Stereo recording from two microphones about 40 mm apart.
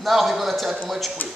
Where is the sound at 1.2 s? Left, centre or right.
Left.